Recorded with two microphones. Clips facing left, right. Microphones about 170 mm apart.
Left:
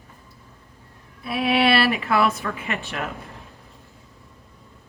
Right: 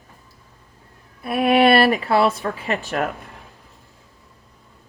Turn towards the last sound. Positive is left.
turn(degrees=-40)  # may be behind; listen again after turning